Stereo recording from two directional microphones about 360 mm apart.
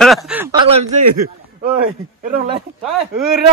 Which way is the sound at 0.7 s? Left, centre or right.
Centre.